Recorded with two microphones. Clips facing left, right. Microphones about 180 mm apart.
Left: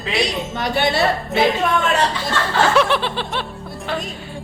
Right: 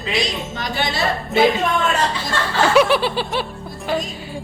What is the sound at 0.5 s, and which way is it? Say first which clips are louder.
Speech: left 6 dB; 65° left (ahead or behind).